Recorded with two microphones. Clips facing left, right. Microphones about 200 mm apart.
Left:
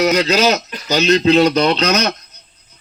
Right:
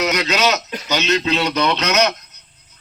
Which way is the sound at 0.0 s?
30° left (ahead or behind).